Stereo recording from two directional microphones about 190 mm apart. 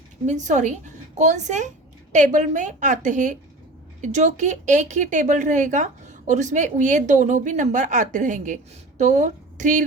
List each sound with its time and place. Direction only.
0.3 s a woman's voice: 40° right (ahead or behind)